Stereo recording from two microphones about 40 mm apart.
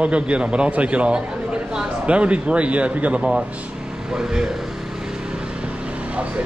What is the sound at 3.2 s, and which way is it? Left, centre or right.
Speech, centre.